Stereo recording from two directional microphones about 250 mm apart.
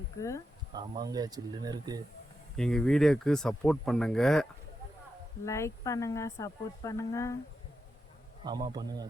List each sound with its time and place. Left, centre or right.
0.2 s speech: centre
0.7 s speech: centre
2.6 s speech: centre
5.5 s speech: centre
8.4 s speech: centre